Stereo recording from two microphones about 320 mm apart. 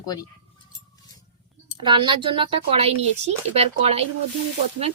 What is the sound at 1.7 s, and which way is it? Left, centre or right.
Speech, centre.